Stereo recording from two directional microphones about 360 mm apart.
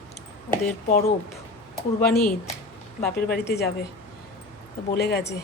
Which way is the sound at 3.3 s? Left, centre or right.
Left.